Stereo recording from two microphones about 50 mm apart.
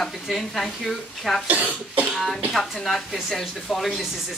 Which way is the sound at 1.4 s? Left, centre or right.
Right.